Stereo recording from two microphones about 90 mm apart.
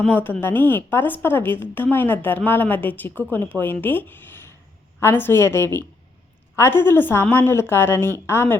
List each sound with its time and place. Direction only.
0.1 s a woman's voice: 25° left (ahead or behind)